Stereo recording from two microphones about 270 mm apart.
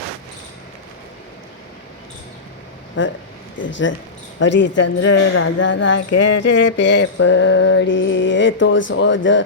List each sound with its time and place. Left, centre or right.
3.0 s mantra: left